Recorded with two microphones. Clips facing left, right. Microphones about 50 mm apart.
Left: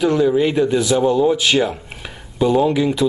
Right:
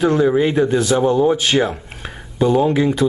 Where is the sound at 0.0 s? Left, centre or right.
Right.